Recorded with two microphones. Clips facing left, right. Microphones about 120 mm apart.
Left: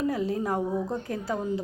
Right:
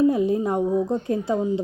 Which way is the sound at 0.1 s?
20° right (ahead or behind).